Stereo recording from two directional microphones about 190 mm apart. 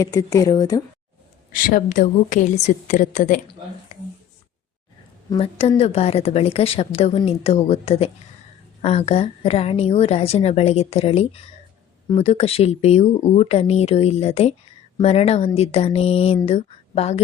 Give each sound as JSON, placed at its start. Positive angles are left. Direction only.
{"t": 0.0, "sound": "speech", "side_deg": 15}
{"t": 1.5, "sound": "a woman's voice", "side_deg": 45}
{"t": 5.3, "sound": "a woman's voice", "side_deg": 30}